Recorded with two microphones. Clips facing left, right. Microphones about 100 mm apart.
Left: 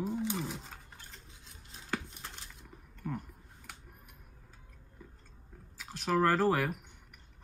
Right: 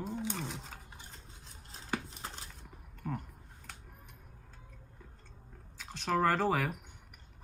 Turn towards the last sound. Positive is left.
turn(degrees=0)  # may be behind; listen again after turning